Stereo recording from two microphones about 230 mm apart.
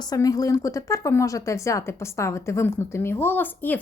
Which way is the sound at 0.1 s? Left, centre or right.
Centre.